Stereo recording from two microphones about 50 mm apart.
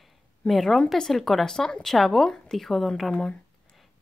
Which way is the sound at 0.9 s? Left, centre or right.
Centre.